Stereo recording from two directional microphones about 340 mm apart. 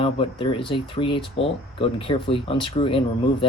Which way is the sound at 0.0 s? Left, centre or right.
Centre.